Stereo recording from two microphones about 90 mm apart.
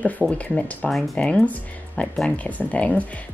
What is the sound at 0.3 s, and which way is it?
Speech, 15° left (ahead or behind).